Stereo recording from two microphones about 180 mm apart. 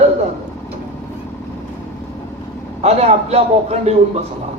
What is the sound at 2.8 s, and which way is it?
Speech, 35° right (ahead or behind).